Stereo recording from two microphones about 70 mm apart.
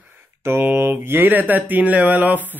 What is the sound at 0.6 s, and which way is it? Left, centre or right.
Speech, right.